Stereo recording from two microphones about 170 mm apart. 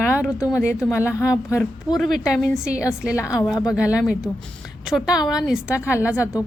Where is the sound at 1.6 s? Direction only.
Centre (ahead or behind).